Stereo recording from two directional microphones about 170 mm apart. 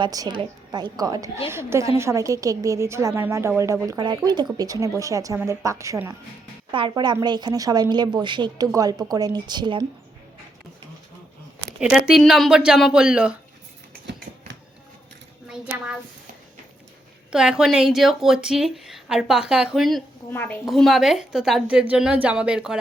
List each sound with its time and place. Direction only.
0.0 s a woman's voice: 25° right (ahead or behind)
3.8 s a woman's voice: 25° right (ahead or behind)
6.7 s a woman's voice: 30° right (ahead or behind)
11.8 s a woman's voice: 5° right (ahead or behind)
15.4 s a sound: 5° right (ahead or behind)
17.3 s a woman's voice: 5° right (ahead or behind)
20.3 s a woman's voice: 10° left (ahead or behind)
20.7 s a woman's voice: centre (ahead or behind)